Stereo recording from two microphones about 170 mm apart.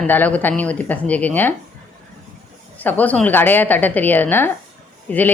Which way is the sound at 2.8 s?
10° left (ahead or behind).